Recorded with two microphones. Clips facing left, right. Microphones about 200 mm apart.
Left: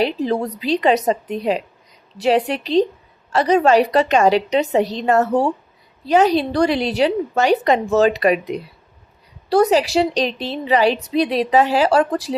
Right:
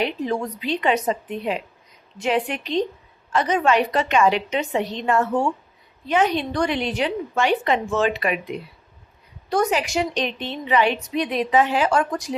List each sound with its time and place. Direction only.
0.0 s a woman's voice: 35° left (ahead or behind)